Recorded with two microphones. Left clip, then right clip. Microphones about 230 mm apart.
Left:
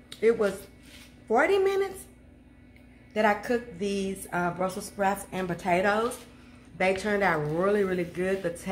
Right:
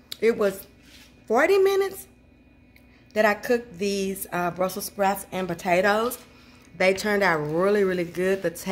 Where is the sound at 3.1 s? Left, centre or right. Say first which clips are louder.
Right 4 dB; right.